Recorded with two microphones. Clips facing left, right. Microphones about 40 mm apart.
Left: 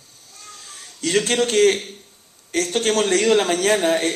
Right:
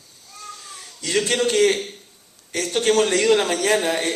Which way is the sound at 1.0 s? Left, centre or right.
Left.